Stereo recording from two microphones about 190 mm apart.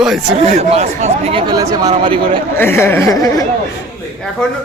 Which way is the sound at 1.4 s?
20° right (ahead or behind).